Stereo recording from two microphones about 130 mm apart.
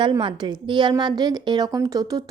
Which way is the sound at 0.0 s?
40° right (ahead or behind).